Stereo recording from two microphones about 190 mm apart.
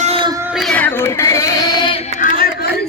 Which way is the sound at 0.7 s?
10° left (ahead or behind).